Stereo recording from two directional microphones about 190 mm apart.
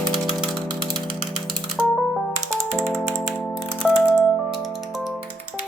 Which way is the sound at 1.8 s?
10° right (ahead or behind).